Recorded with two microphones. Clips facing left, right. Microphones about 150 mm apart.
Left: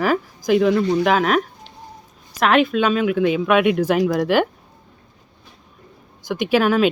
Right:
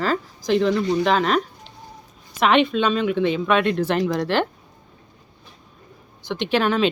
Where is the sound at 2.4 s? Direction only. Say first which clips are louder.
Left 1 dB; 5° left (ahead or behind).